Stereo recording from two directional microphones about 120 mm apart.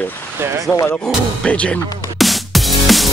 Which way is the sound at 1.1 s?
10° left (ahead or behind).